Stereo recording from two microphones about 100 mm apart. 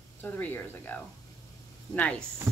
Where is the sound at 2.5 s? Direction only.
30° right (ahead or behind).